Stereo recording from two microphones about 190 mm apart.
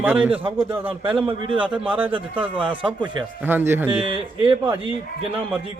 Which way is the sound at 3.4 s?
10° right (ahead or behind).